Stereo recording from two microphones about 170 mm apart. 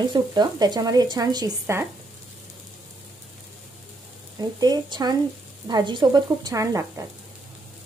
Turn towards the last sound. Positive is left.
turn(degrees=-20)  # may be behind; listen again after turning